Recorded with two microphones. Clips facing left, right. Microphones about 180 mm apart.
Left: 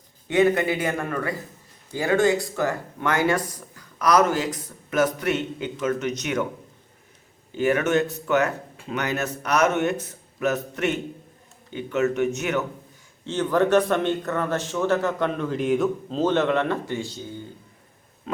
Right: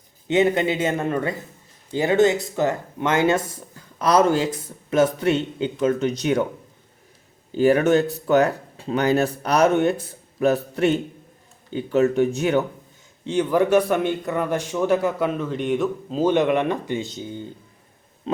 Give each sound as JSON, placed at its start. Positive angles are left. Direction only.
{"t": 0.3, "sound": "speech", "side_deg": -20}
{"t": 7.5, "sound": "speech", "side_deg": -35}
{"t": 13.2, "sound": "a man's voice", "side_deg": -15}